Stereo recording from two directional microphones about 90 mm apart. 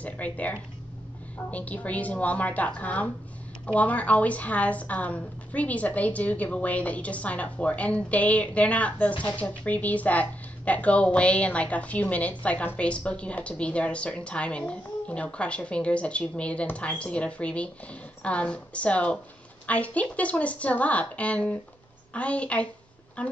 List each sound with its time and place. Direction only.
0.0 s speech: 15° left (ahead or behind)